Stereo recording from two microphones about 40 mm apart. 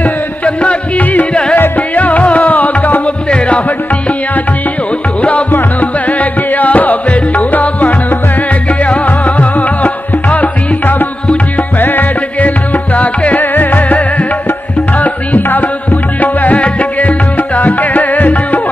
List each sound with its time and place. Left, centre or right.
0.6 s music: left
3.3 s music: left
5.2 s music: left
13.4 s music: left